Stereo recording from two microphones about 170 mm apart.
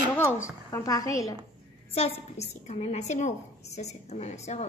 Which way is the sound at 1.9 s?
35° left (ahead or behind).